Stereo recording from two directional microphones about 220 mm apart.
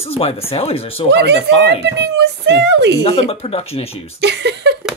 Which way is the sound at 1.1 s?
50° right (ahead or behind).